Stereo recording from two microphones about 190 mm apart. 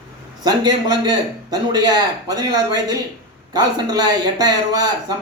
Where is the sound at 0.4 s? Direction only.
20° right (ahead or behind).